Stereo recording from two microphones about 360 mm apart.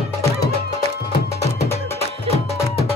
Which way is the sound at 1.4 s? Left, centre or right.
Centre.